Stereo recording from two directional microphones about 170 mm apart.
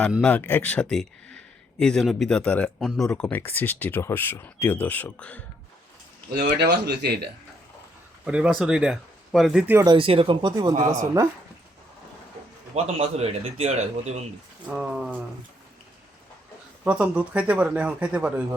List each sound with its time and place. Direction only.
0.3 s speech: 10° left (ahead or behind)
6.3 s speech: 75° right (ahead or behind)
8.2 s speech: 5° right (ahead or behind)
9.8 s speech: 30° right (ahead or behind)
12.7 s a man's voice: 40° right (ahead or behind)
14.7 s speech: 5° right (ahead or behind)
16.8 s speech: 5° right (ahead or behind)